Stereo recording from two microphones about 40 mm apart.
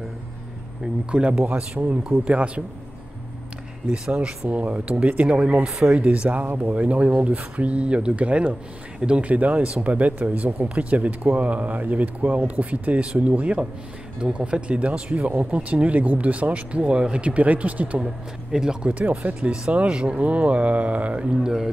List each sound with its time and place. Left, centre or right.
1.1 s speech: right
4.5 s speech: right
5.7 s speech: centre
5.9 s speech: right
13.0 s speech: right
13.3 s speech: right
18.0 s speech: centre
18.9 s speech: right
19.9 s speech: right
20.2 s speech: right
21.3 s speech: centre